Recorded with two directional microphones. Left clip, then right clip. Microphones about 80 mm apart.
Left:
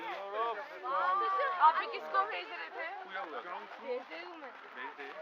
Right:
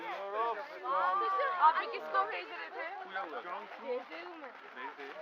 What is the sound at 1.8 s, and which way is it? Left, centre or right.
Speech, left.